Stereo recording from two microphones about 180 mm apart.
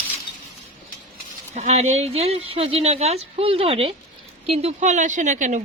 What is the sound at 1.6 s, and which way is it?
A woman's voice, 35° right (ahead or behind).